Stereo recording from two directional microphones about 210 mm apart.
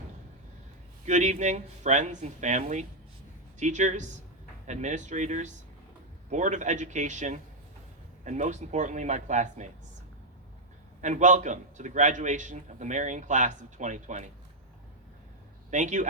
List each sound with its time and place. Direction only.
1.0 s a man's voice: 35° right (ahead or behind)
11.0 s a man's voice: 35° right (ahead or behind)
15.7 s a man's voice: 35° right (ahead or behind)